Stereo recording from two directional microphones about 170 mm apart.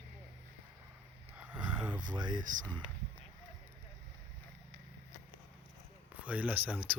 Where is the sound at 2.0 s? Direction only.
25° right (ahead or behind).